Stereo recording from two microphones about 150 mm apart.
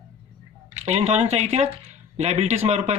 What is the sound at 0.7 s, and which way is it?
Speech, 50° right (ahead or behind).